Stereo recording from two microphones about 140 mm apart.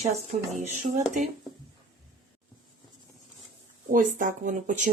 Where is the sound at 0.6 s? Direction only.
60° right (ahead or behind).